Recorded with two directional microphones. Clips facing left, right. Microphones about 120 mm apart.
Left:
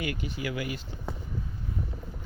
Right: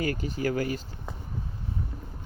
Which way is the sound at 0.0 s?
40° right (ahead or behind).